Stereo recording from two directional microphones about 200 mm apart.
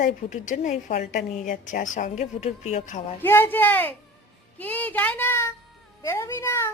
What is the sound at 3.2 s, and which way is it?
A woman's voice, 10° left (ahead or behind).